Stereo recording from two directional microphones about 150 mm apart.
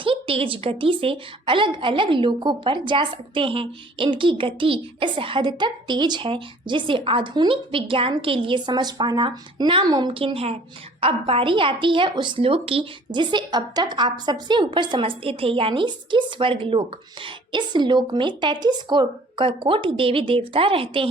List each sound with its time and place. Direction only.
0.0 s a woman's voice: 35° right (ahead or behind)